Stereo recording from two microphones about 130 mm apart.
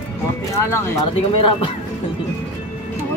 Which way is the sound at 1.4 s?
40° left (ahead or behind).